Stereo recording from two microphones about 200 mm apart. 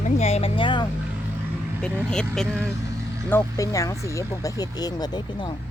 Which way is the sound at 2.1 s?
5° left (ahead or behind).